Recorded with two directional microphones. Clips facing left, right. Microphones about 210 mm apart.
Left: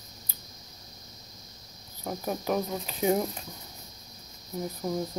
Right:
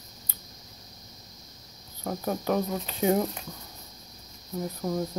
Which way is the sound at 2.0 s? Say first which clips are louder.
Right 2 dB; 10° left (ahead or behind).